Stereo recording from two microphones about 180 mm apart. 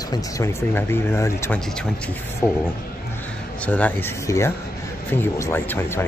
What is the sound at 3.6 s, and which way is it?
Speech, 10° left (ahead or behind).